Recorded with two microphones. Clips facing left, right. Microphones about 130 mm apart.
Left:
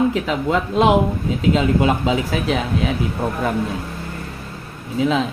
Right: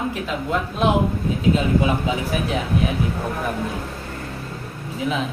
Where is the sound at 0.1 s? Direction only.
90° left.